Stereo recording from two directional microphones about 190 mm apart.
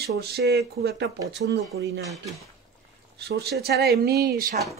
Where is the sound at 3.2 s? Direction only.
60° right (ahead or behind).